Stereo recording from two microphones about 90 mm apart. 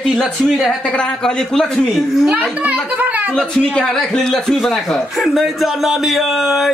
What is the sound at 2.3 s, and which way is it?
Speech, 15° right (ahead or behind).